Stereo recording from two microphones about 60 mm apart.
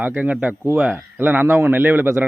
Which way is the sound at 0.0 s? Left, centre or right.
Right.